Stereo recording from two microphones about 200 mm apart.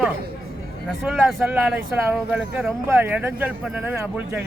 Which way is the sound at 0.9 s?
Centre (ahead or behind).